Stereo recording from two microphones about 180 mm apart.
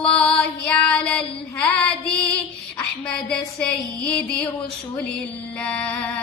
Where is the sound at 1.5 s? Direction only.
5° left (ahead or behind).